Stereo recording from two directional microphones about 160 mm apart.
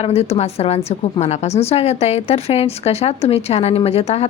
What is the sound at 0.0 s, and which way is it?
A woman's voice, 40° left (ahead or behind).